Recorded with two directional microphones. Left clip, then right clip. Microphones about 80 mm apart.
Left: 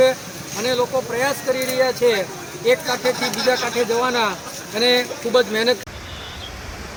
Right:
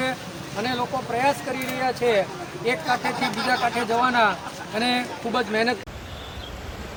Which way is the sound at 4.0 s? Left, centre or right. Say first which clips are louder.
Even; right.